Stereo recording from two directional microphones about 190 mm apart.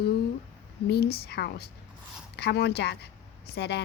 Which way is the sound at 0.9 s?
55° left (ahead or behind).